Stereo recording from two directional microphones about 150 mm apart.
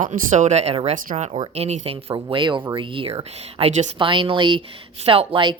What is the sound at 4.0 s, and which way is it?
Speech, 35° right (ahead or behind).